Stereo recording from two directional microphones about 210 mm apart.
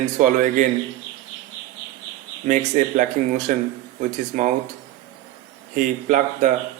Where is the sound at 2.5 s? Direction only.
35° right (ahead or behind).